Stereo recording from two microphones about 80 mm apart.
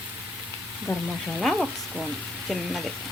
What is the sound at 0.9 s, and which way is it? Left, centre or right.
Speech, left.